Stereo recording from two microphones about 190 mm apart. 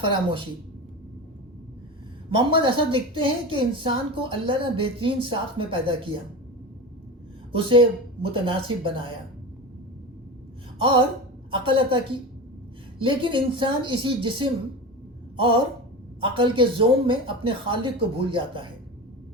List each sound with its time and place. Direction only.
0.0 s a woman's voice: 25° right (ahead or behind)
2.3 s a woman's voice: 25° right (ahead or behind)
7.5 s a woman's voice: 30° right (ahead or behind)
10.8 s a woman's voice: 25° right (ahead or behind)